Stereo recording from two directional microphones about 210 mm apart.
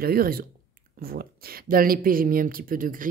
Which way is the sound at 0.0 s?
45° right (ahead or behind).